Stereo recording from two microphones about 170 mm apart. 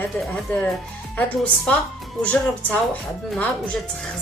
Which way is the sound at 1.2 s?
10° left (ahead or behind).